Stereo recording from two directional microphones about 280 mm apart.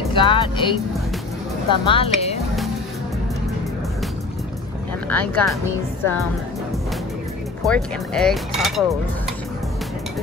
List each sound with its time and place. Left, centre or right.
0.1 s speech: centre
5.1 s speech: centre
7.6 s speech: centre